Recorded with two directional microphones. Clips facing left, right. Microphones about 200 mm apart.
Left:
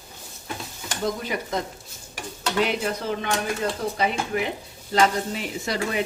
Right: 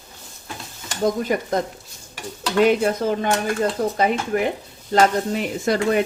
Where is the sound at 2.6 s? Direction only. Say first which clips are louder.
Right 8 dB; 45° right (ahead or behind).